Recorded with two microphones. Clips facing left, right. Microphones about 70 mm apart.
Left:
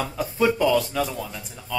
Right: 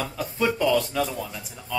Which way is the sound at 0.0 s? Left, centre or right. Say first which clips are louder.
Left 3 dB; centre.